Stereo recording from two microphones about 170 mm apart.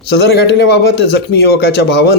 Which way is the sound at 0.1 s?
80° left.